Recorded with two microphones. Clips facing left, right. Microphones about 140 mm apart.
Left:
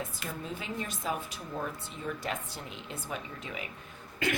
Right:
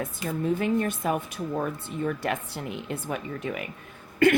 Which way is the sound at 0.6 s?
60° right (ahead or behind).